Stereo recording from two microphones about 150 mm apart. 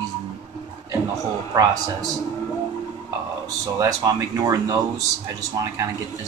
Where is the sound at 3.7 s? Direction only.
25° right (ahead or behind).